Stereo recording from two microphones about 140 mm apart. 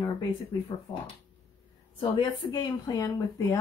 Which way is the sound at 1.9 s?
30° left (ahead or behind).